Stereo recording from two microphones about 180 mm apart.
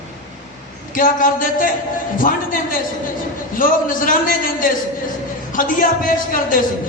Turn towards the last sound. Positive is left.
turn(degrees=50)  # may be behind; listen again after turning